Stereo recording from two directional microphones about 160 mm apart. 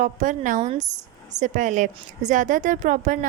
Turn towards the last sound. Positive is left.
turn(degrees=-55)  # may be behind; listen again after turning